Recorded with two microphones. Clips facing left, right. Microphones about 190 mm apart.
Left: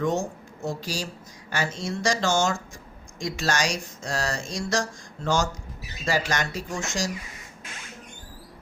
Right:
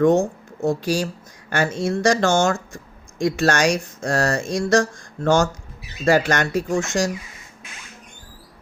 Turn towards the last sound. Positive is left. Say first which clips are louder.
# right 9 dB
turn(degrees=-55)  # may be behind; listen again after turning